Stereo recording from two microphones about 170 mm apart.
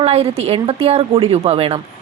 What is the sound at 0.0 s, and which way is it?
A woman's voice, 35° right (ahead or behind).